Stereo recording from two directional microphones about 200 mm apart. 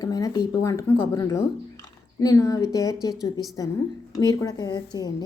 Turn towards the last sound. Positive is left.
turn(degrees=20)  # may be behind; listen again after turning